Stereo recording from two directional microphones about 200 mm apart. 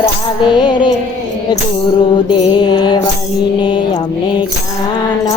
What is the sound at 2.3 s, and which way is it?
Music, 20° left (ahead or behind).